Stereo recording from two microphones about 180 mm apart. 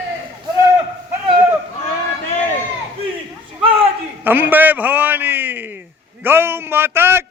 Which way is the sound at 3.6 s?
30° right (ahead or behind).